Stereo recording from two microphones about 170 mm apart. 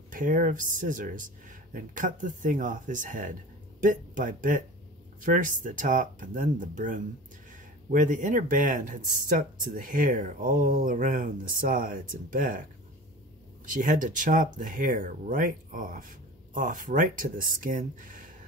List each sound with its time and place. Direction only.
0.1 s speech: 50° right (ahead or behind)
13.7 s speech: 50° right (ahead or behind)